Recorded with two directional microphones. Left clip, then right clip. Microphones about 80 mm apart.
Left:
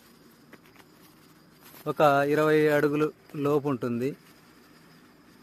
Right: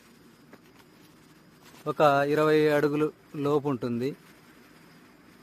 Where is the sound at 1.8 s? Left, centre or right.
Centre.